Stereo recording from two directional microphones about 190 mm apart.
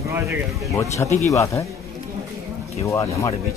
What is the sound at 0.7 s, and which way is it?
Speech, 15° left (ahead or behind).